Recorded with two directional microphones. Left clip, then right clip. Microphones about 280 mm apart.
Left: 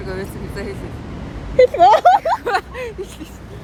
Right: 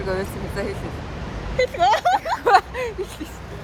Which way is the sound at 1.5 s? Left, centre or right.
Left.